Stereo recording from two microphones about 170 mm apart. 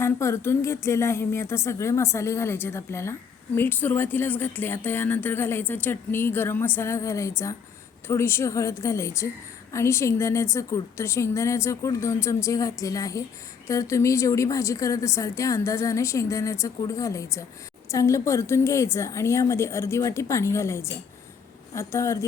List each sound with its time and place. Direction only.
0.0 s speech: 15° left (ahead or behind)